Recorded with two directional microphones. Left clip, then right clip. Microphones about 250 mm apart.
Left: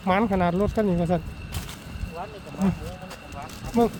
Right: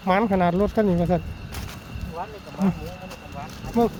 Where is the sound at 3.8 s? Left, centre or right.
Centre.